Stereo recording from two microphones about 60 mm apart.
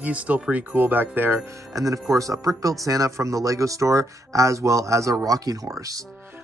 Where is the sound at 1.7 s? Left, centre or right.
Right.